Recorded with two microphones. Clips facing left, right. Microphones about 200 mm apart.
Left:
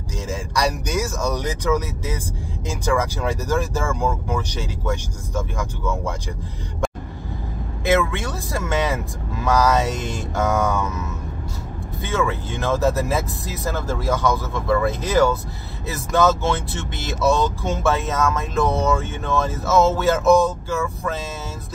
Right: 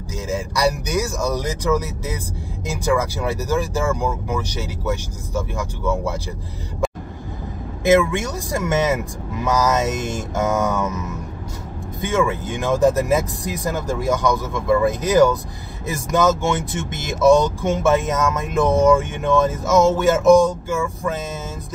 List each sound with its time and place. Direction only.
0.6 s speech: 10° right (ahead or behind)
8.0 s speech: 15° right (ahead or behind)
12.0 s speech: 15° right (ahead or behind)